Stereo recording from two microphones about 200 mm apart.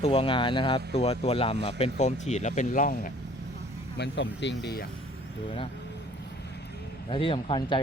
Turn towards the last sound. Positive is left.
turn(degrees=25)  # may be behind; listen again after turning